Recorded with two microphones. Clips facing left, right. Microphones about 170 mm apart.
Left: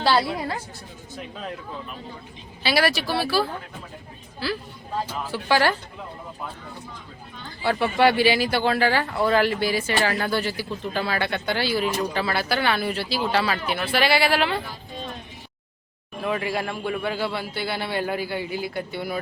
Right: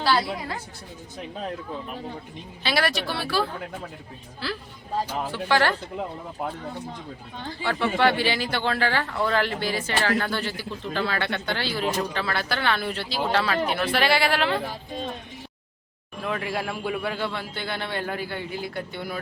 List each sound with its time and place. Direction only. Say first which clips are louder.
0.0 s a woman's voice: left 2 dB; 30° left (ahead or behind)
2.6 s speech: left 3 dB; 5° left (ahead or behind)
4.4 s speech: left 4 dB; 5° left (ahead or behind)
7.7 s speech: left 3 dB; 10° left (ahead or behind)
16.2 s speech: left 3 dB; 5° left (ahead or behind)